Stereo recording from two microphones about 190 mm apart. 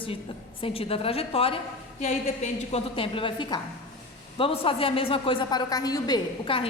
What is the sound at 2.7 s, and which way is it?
A woman's voice, 30° left (ahead or behind).